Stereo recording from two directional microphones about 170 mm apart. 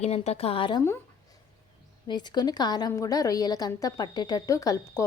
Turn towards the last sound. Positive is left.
turn(degrees=20)  # may be behind; listen again after turning